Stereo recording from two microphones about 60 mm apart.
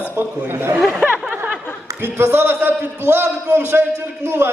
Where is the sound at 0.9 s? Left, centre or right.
Right.